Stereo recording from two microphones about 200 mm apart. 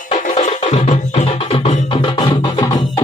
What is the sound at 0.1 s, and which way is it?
Music, 35° left (ahead or behind).